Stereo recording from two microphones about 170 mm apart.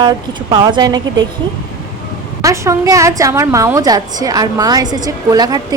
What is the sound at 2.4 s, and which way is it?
A woman's voice, 20° right (ahead or behind).